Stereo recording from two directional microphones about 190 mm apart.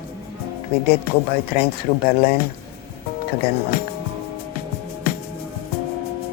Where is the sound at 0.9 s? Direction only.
55° left (ahead or behind).